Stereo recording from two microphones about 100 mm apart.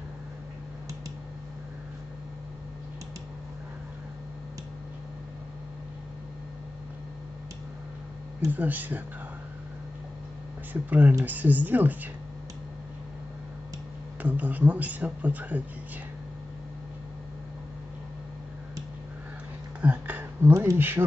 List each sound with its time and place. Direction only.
8.5 s speech: 15° right (ahead or behind)
10.7 s speech: 15° right (ahead or behind)
14.2 s speech: 15° right (ahead or behind)
19.8 s a sound: 15° right (ahead or behind)
20.7 s speech: 20° right (ahead or behind)